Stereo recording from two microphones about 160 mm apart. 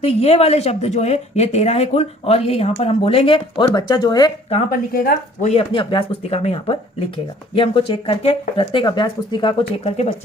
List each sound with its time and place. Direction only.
0.0 s speech: 40° left (ahead or behind)
4.7 s speech: 60° left (ahead or behind)
5.5 s speech: 35° left (ahead or behind)